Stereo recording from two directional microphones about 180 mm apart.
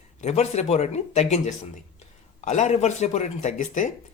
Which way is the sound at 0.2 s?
40° left (ahead or behind).